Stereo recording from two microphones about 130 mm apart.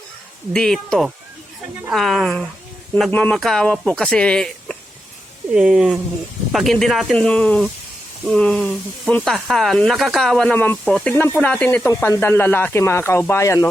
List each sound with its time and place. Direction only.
0.5 s speech: 5° left (ahead or behind)
5.5 s speech: 5° right (ahead or behind)
11.1 s speech: 15° left (ahead or behind)